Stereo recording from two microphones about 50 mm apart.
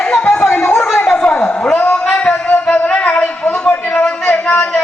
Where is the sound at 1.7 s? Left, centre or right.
Left.